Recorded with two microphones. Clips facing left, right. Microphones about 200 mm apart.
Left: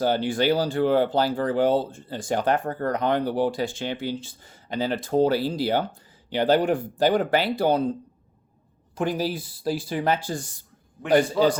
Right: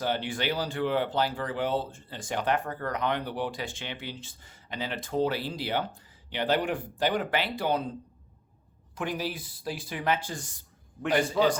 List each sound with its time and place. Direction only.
0.0 s speech: 35° left (ahead or behind)
9.0 s speech: 35° left (ahead or behind)